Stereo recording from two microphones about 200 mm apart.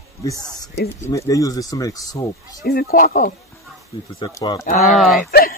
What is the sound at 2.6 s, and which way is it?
Speech, 50° left (ahead or behind).